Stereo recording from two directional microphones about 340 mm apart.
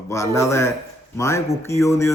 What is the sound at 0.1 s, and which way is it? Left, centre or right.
A man's voice, centre.